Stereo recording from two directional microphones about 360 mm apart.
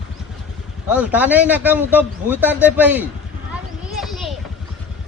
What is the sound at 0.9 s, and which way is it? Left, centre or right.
Speech, centre.